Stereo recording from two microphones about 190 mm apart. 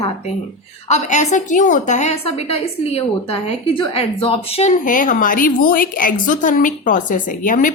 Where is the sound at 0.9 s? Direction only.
35° left (ahead or behind).